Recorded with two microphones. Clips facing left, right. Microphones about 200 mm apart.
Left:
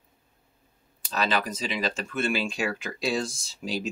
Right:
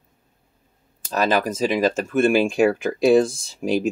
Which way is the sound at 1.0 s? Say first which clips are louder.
Right 7 dB; 50° right (ahead or behind).